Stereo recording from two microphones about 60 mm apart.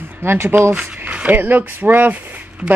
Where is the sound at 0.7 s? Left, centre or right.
Right.